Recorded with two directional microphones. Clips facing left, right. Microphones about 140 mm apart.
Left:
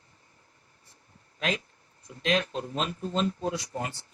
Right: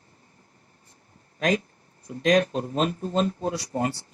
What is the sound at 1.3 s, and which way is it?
Speech, 40° right (ahead or behind).